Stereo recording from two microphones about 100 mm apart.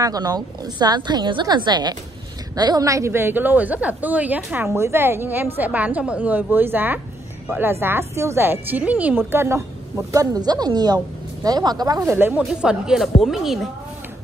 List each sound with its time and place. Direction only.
0.0 s a woman's voice: 40° right (ahead or behind); by 4.7 s 10° right (ahead or behind)
4.7 s a woman's voice: 25° right (ahead or behind)
9.3 s a woman's voice: 25° right (ahead or behind); by 12.1 s 40° right (ahead or behind)
12.1 s a woman's voice: 20° right (ahead or behind)
12.4 s speech: 5° right (ahead or behind)